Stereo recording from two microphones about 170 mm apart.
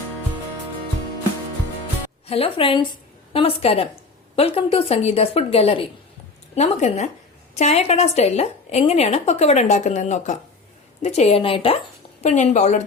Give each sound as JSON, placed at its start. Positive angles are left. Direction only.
{"t": 2.2, "sound": "a woman's voice", "side_deg": 35}